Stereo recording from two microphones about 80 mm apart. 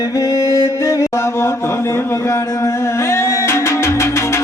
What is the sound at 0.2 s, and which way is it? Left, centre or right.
Music, left.